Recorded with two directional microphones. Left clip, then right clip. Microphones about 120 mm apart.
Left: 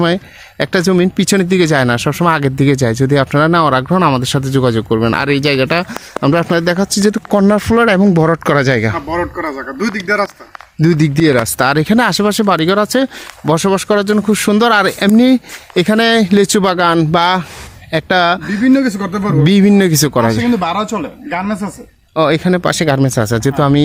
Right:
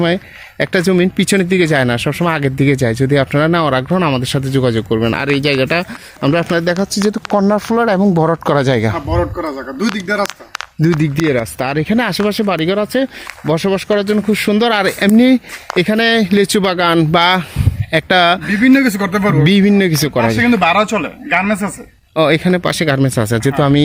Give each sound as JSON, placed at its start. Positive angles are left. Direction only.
{"t": 0.6, "sound": "speech", "side_deg": 20}
{"t": 7.9, "sound": "speech", "side_deg": 25}
{"t": 8.4, "sound": "speech", "side_deg": 15}
{"t": 8.7, "sound": "speech", "side_deg": 0}
{"t": 9.0, "sound": "a man's voice", "side_deg": -30}
{"t": 9.9, "sound": "speech", "side_deg": -60}
{"t": 11.0, "sound": "speech", "side_deg": 50}
{"t": 16.9, "sound": "speech", "side_deg": 5}
{"t": 18.6, "sound": "speech", "side_deg": -70}
{"t": 19.5, "sound": "speech", "side_deg": 25}
{"t": 20.1, "sound": "speech", "side_deg": 25}
{"t": 20.5, "sound": "speech", "side_deg": -45}
{"t": 22.1, "sound": "speech", "side_deg": 10}